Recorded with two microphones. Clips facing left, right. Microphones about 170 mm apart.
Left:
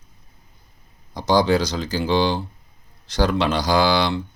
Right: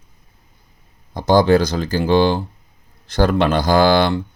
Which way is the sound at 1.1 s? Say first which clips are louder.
Right 5 dB; 50° right (ahead or behind).